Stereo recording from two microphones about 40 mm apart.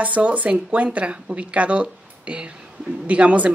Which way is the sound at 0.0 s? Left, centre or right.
Right.